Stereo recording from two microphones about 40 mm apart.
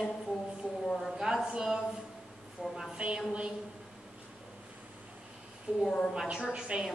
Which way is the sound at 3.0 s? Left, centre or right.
Right.